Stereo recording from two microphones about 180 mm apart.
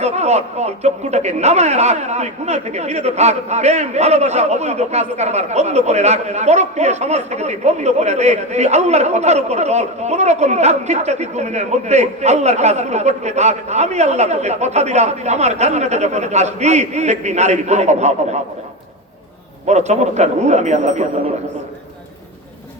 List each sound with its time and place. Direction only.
0.0 s a man's voice: 40° right (ahead or behind)
19.6 s a man's voice: 40° right (ahead or behind)